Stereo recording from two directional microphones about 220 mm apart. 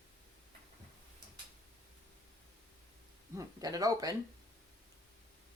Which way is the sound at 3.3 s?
15° right (ahead or behind).